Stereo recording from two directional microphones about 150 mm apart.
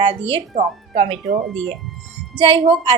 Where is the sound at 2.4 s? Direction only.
35° right (ahead or behind).